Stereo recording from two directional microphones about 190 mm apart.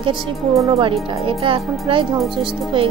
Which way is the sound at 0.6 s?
25° right (ahead or behind).